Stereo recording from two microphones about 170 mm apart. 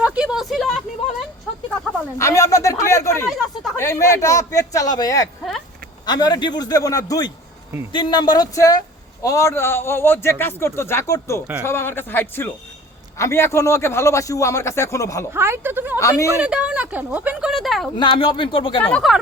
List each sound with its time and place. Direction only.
0.0 s a sound: 5° right (ahead or behind)
2.1 s a man's voice: 15° left (ahead or behind)
15.3 s speech: 15° right (ahead or behind)
16.0 s a man's voice: 20° left (ahead or behind)
16.3 s speech: 5° right (ahead or behind)
17.9 s a man's voice: 30° left (ahead or behind)
18.9 s a man's voice: 10° left (ahead or behind)